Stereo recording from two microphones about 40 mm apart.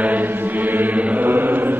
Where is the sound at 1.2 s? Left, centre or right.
Right.